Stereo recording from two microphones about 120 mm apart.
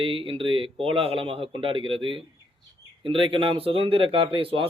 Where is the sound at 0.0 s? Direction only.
50° right (ahead or behind).